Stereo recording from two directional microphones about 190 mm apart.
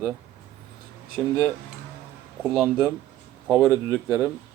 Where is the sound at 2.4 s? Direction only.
Centre (ahead or behind).